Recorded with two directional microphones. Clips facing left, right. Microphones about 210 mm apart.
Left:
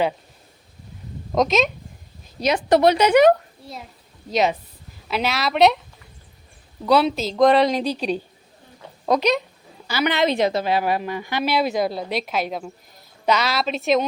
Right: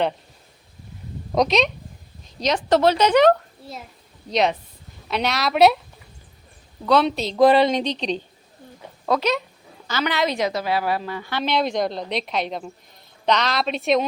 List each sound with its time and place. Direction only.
1.4 s a woman's voice: centre (ahead or behind)
6.8 s a woman's voice: 5° left (ahead or behind)